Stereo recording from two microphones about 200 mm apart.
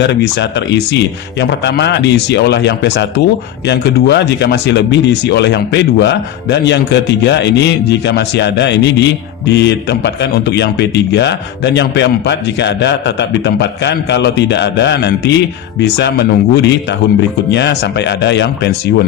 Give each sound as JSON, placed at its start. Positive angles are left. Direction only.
{"t": 0.0, "sound": "a man's voice", "side_deg": 55}